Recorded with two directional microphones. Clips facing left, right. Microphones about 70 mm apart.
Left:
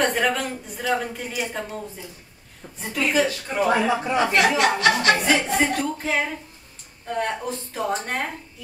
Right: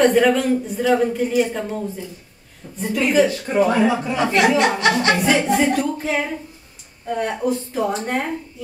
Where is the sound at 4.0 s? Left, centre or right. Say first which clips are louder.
Right 1 dB; left.